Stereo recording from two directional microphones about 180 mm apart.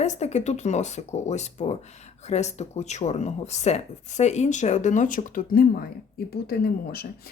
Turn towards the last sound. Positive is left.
turn(degrees=60)  # may be behind; listen again after turning